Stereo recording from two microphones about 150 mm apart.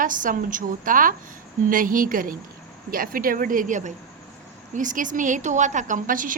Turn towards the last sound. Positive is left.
turn(degrees=-65)  # may be behind; listen again after turning